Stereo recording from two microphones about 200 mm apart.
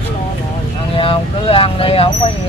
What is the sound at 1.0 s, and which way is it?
Vehicle, 25° left (ahead or behind).